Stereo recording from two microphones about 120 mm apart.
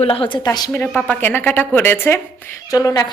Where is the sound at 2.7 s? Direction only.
30° left (ahead or behind).